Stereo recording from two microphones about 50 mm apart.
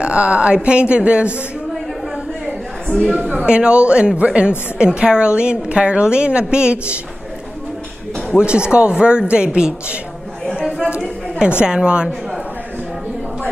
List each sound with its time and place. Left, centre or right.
0.0 s a woman's voice: right
2.4 s a sound: centre
3.4 s a woman's voice: centre
8.4 s a woman's voice: right
11.0 s a sound: centre
11.6 s a woman's voice: centre